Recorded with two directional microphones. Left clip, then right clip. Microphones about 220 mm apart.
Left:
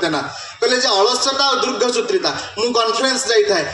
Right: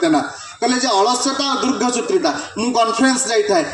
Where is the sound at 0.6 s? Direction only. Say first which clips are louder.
Left 1 dB; 50° right (ahead or behind).